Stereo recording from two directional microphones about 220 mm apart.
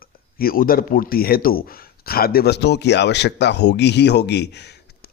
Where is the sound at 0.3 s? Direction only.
40° left (ahead or behind).